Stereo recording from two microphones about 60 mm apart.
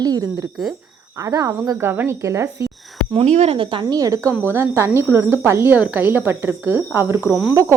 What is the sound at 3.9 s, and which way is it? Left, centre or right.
Speech, right.